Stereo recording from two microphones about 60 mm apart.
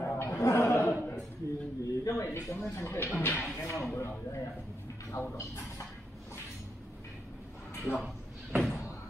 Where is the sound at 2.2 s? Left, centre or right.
Left.